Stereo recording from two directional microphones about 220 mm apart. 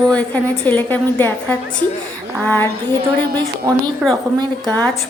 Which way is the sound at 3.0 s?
20° right (ahead or behind).